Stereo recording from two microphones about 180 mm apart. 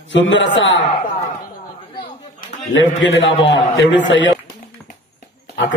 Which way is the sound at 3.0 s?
90° left.